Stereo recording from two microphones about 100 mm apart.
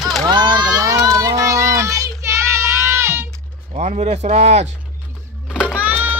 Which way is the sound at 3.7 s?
90° right.